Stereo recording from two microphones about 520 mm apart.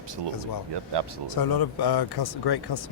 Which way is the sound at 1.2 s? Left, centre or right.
Left.